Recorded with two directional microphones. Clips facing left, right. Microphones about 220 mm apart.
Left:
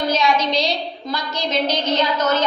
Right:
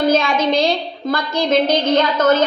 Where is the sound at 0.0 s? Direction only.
50° right (ahead or behind).